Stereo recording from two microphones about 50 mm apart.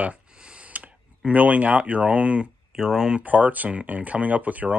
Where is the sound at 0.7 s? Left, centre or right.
Right.